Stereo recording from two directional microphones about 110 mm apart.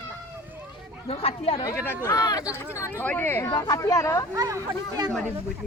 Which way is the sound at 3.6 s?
30° left (ahead or behind).